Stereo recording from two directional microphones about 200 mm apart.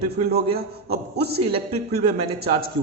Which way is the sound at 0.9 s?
55° right (ahead or behind).